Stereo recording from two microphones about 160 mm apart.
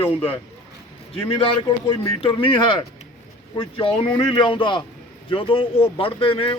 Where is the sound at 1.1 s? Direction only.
35° left (ahead or behind).